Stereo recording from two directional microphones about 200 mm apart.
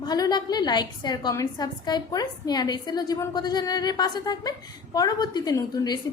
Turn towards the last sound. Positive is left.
turn(degrees=20)  # may be behind; listen again after turning